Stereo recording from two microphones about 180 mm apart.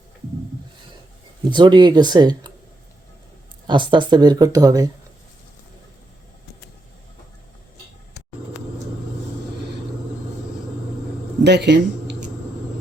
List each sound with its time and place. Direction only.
1.5 s speech: 25° right (ahead or behind)
3.7 s speech: 25° right (ahead or behind)
11.4 s speech: 70° right (ahead or behind)